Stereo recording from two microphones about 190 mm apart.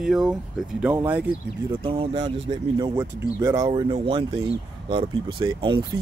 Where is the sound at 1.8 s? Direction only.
30° right (ahead or behind).